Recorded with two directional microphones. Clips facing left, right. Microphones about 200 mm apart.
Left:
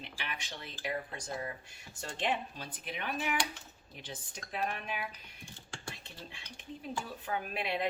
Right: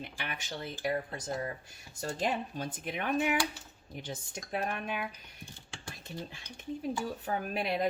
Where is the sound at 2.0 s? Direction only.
40° right (ahead or behind).